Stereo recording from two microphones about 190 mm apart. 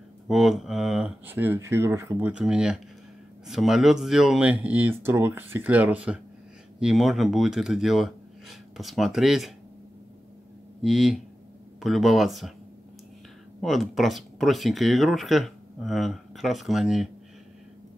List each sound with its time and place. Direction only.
0.3 s speech: centre (ahead or behind)
10.8 s speech: centre (ahead or behind)
13.6 s speech: centre (ahead or behind)